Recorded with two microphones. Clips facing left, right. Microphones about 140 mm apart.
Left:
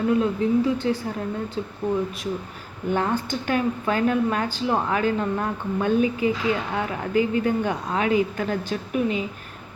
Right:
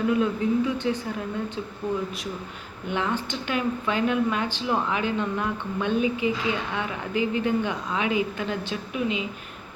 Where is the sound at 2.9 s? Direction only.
40° left (ahead or behind).